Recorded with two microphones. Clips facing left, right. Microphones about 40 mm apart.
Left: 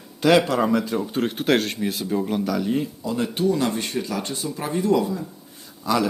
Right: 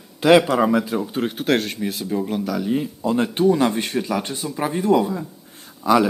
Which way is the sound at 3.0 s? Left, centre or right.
Right.